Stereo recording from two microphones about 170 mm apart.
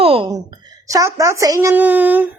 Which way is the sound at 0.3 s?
20° right (ahead or behind).